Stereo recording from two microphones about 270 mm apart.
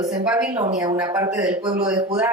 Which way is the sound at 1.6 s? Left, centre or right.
Centre.